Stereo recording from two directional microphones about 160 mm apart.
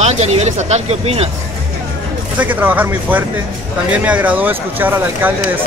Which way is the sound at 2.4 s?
10° right (ahead or behind).